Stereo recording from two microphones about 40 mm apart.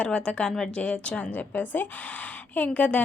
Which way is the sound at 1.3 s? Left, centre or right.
Left.